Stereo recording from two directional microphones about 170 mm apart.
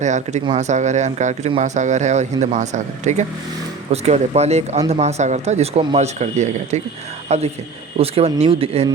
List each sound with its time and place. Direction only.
0.0 s speech: 45° right (ahead or behind)